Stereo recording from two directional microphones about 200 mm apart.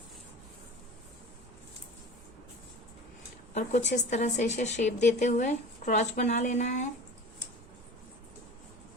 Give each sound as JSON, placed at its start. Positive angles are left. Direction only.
{"t": 3.5, "sound": "a woman's voice", "side_deg": 35}